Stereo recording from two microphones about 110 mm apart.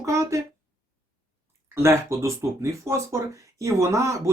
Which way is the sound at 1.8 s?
25° right (ahead or behind).